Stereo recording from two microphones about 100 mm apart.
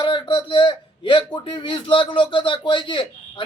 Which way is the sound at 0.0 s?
55° left (ahead or behind).